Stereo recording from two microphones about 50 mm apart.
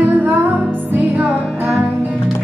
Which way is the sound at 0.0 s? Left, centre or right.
Right.